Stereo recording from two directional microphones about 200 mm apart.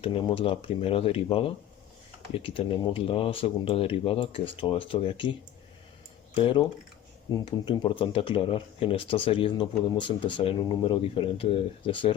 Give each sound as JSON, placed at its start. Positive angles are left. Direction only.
{"t": 0.0, "sound": "speech", "side_deg": 25}
{"t": 6.3, "sound": "speech", "side_deg": 25}